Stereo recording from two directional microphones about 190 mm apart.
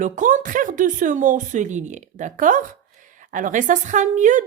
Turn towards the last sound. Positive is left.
turn(degrees=-40)  # may be behind; listen again after turning